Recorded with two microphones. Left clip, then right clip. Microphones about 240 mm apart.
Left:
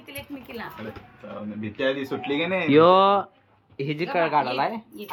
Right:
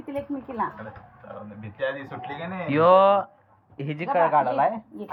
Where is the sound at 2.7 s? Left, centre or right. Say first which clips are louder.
Even; centre.